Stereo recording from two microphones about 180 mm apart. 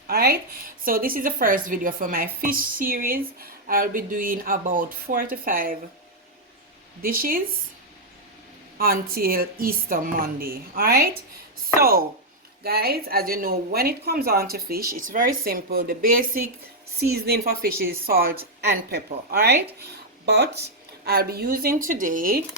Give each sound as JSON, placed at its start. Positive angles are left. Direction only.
{"t": 0.1, "sound": "a woman's voice", "side_deg": -60}
{"t": 7.0, "sound": "a woman's voice", "side_deg": -50}
{"t": 8.8, "sound": "a woman's voice", "side_deg": -55}